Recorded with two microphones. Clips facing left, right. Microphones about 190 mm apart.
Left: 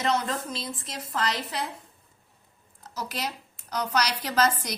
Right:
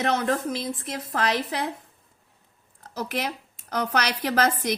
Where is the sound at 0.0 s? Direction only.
55° right (ahead or behind).